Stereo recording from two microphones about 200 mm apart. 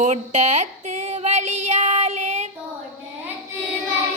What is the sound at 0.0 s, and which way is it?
Female singing, 35° right (ahead or behind).